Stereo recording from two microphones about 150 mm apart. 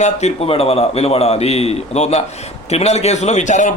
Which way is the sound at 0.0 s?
50° left (ahead or behind).